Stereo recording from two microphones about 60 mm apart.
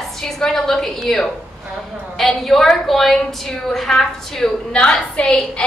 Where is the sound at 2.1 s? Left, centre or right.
Centre.